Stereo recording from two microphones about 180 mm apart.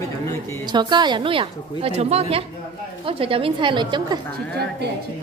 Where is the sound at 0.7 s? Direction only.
25° right (ahead or behind).